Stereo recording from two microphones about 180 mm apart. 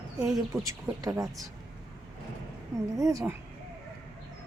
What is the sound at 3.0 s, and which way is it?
Speech, 15° right (ahead or behind).